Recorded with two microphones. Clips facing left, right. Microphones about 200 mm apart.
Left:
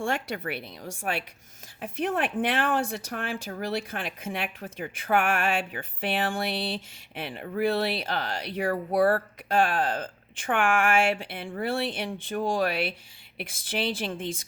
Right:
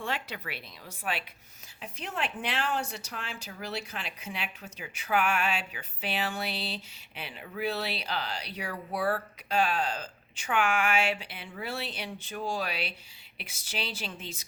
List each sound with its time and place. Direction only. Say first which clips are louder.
0.0 s a woman's voice: left 6 dB; 50° left (ahead or behind)